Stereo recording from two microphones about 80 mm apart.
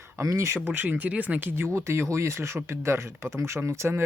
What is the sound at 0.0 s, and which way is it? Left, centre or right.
Speech, right.